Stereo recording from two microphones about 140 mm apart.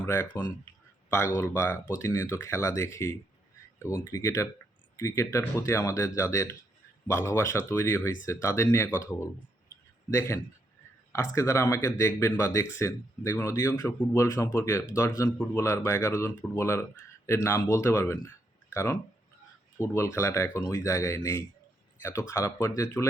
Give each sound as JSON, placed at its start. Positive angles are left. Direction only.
{"t": 0.0, "sound": "speech", "side_deg": 15}
{"t": 9.1, "sound": "a sound", "side_deg": 20}
{"t": 11.1, "sound": "speech", "side_deg": 20}